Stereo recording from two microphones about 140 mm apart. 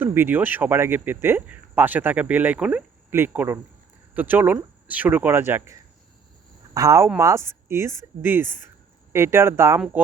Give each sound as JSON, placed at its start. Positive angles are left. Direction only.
{"t": 0.0, "sound": "speech", "side_deg": -15}
{"t": 6.7, "sound": "speech", "side_deg": -25}